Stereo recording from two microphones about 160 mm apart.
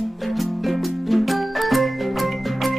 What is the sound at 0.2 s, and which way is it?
Music, centre (ahead or behind).